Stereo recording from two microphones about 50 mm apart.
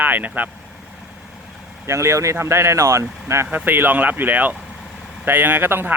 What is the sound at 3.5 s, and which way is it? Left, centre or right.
Speech, right.